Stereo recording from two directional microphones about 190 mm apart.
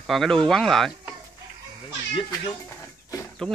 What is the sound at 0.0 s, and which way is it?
Speech, centre (ahead or behind).